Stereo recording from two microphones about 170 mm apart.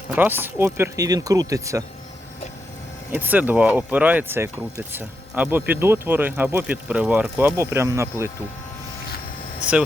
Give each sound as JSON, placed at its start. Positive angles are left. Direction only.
{"t": 0.2, "sound": "speech", "side_deg": -10}
{"t": 3.1, "sound": "speech", "side_deg": -10}